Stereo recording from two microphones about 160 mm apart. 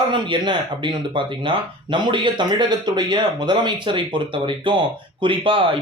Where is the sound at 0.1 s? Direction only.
30° right (ahead or behind).